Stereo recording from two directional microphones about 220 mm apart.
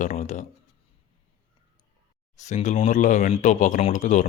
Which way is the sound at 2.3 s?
30° left (ahead or behind).